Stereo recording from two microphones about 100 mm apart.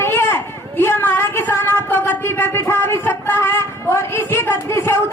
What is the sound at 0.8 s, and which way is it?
Speech, 25° left (ahead or behind).